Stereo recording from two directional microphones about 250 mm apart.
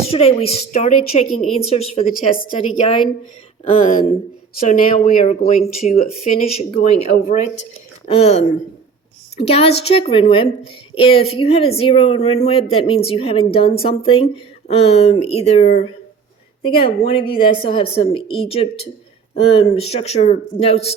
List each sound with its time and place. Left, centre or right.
0.1 s a woman's voice: left